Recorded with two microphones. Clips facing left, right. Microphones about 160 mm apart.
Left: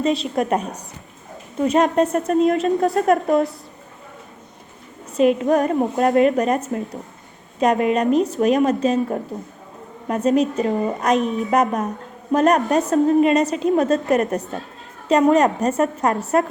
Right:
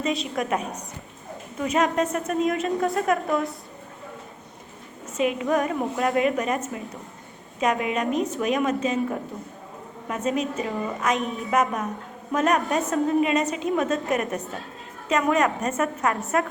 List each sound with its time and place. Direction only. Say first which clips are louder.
0.0 s a woman's voice: left 6 dB; 35° left (ahead or behind)
5.1 s a woman's voice: left 7 dB; 40° left (ahead or behind)